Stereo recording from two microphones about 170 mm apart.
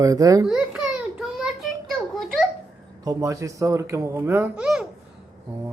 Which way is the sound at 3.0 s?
20° right (ahead or behind).